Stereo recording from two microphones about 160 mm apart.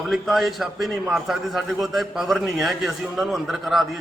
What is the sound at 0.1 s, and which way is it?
A man's voice, centre (ahead or behind).